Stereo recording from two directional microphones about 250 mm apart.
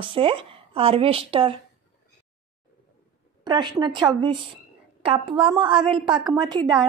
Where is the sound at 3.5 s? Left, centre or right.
Centre.